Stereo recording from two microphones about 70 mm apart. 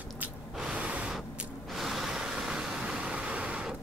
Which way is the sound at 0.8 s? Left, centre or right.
Centre.